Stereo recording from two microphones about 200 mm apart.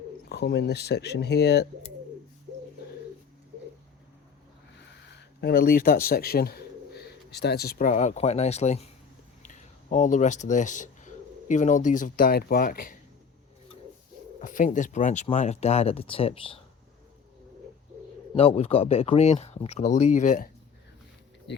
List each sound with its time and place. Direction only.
0.3 s speech: 55° left (ahead or behind)
5.4 s speech: 50° left (ahead or behind)
14.4 s speech: 40° left (ahead or behind)
18.3 s speech: 30° left (ahead or behind)